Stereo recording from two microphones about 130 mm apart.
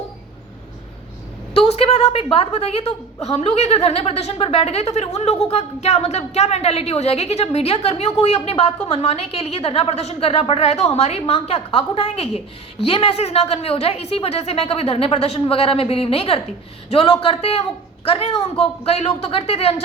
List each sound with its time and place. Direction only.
1.5 s a woman's voice: 50° left (ahead or behind)